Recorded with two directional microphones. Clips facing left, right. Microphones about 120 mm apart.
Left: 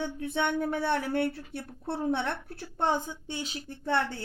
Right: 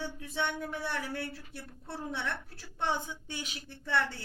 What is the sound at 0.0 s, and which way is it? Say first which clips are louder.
A woman's voice: left 5 dB; 60° left (ahead or behind).